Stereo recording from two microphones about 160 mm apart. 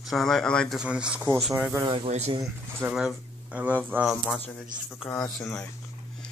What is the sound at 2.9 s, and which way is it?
Speech, centre (ahead or behind).